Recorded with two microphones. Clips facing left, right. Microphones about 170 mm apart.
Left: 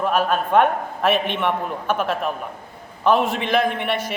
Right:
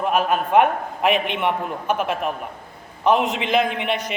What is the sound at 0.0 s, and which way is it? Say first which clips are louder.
A man's voice: even; 10° right (ahead or behind).